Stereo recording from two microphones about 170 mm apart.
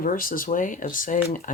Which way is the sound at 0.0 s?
55° left (ahead or behind).